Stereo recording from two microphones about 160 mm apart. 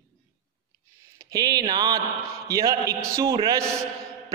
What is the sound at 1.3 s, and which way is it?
Speech, 25° right (ahead or behind).